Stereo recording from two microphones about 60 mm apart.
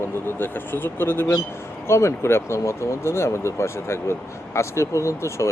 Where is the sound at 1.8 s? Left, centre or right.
Left.